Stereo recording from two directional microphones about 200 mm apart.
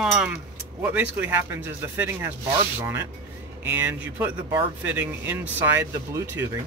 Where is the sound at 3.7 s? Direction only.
10° right (ahead or behind).